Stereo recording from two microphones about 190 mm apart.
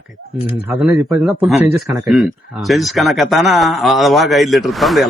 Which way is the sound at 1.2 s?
Centre (ahead or behind).